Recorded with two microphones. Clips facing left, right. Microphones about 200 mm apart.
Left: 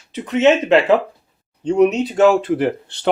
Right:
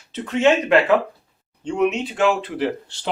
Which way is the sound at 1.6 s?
40° left (ahead or behind).